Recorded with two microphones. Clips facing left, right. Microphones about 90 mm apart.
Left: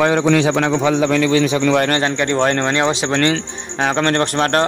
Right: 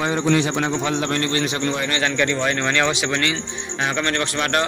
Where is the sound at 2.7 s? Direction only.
30° left (ahead or behind).